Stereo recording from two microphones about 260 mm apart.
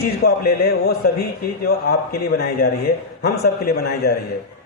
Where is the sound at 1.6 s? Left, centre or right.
Left.